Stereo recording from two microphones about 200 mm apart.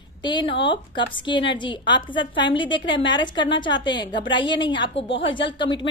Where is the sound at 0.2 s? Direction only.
25° left (ahead or behind).